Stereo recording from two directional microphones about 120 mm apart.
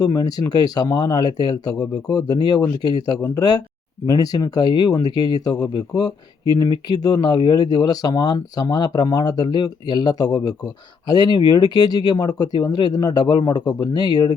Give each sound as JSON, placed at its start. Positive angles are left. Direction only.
{"t": 0.0, "sound": "speech", "side_deg": 30}